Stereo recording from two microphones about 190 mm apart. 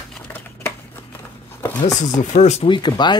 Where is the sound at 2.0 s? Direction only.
40° left (ahead or behind); by 3.1 s 25° left (ahead or behind).